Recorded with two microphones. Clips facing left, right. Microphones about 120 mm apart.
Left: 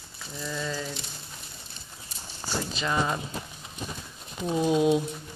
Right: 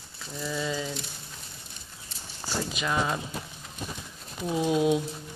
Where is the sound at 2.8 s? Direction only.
Centre (ahead or behind).